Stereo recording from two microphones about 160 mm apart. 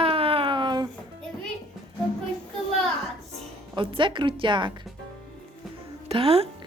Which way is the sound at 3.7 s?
30° right (ahead or behind).